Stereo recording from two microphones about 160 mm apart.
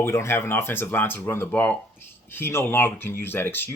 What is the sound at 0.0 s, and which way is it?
Speech, 15° left (ahead or behind).